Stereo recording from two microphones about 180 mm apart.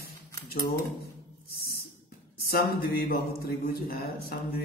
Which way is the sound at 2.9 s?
60° left (ahead or behind).